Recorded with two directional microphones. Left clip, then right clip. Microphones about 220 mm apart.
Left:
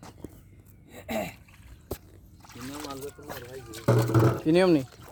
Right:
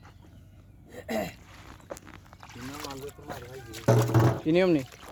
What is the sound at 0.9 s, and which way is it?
Dog, 5° right (ahead or behind).